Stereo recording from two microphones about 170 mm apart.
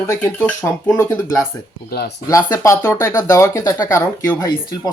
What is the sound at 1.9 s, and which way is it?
Speech, 70° left (ahead or behind).